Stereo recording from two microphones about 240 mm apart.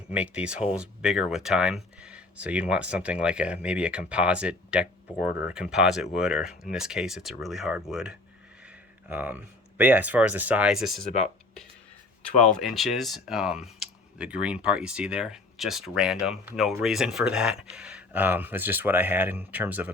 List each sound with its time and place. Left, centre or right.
0.1 s speech: centre
12.5 s speech: centre